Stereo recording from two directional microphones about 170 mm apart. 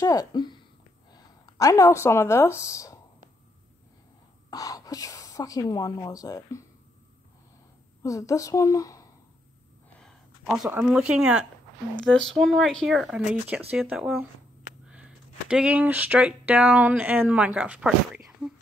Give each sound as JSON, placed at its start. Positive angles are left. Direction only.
{"t": 0.0, "sound": "speech", "side_deg": 20}
{"t": 4.5, "sound": "speech", "side_deg": 20}
{"t": 8.0, "sound": "speech", "side_deg": 20}
{"t": 9.9, "sound": "speech", "side_deg": 0}